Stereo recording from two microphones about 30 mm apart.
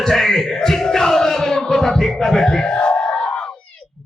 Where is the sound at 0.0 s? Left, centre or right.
Centre; by 3.5 s left.